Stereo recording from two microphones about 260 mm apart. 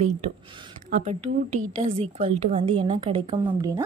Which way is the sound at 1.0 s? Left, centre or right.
Right.